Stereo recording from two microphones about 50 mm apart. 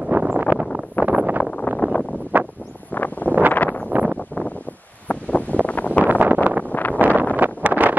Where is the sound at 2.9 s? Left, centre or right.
Left.